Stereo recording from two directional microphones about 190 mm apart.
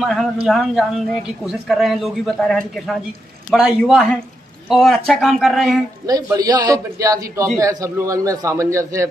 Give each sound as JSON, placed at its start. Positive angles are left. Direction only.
{"t": 0.0, "sound": "speech", "side_deg": 0}
{"t": 6.0, "sound": "a man's voice", "side_deg": -20}